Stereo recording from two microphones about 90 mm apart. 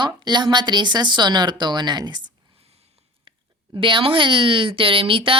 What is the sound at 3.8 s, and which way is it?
A woman's voice, 70° right (ahead or behind).